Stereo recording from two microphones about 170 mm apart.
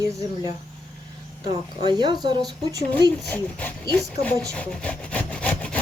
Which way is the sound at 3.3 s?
10° left (ahead or behind).